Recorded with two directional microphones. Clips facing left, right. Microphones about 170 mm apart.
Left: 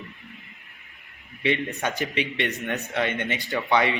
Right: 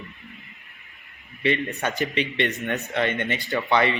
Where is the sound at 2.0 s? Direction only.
15° left (ahead or behind).